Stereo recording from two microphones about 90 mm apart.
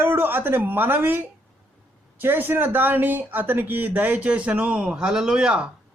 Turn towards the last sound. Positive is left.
turn(degrees=-10)  # may be behind; listen again after turning